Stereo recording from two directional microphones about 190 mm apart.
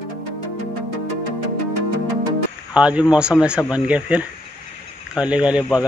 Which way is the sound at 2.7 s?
5° right (ahead or behind).